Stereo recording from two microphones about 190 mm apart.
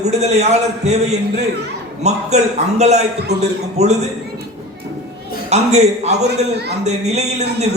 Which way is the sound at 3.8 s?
35° right (ahead or behind).